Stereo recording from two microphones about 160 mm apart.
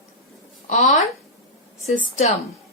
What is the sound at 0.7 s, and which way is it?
Speech, 50° left (ahead or behind).